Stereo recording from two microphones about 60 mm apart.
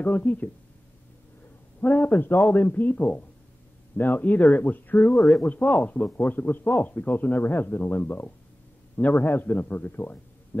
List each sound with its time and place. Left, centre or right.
0.0 s speech: left
1.8 s speech: left
5.1 s speech: centre
5.4 s speech: left